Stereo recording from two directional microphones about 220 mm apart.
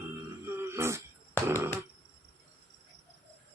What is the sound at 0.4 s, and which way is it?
Throat clearing, 10° right (ahead or behind).